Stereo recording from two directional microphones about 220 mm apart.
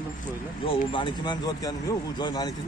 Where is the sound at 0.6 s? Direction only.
20° left (ahead or behind).